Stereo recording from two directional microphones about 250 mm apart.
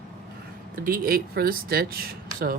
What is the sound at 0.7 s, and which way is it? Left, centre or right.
Speech, right.